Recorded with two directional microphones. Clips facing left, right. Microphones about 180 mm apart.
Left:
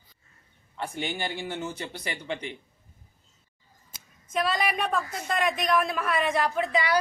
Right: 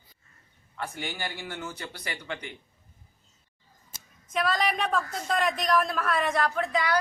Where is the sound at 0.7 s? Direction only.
20° left (ahead or behind).